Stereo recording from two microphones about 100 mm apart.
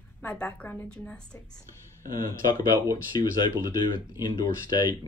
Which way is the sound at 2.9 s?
45° left (ahead or behind).